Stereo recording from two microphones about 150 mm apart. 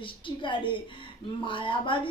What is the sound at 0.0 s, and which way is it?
A woman's voice, 35° left (ahead or behind).